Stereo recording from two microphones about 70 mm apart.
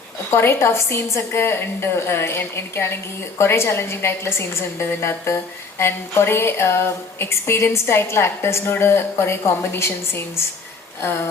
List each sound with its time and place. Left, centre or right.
0.3 s a woman's voice: left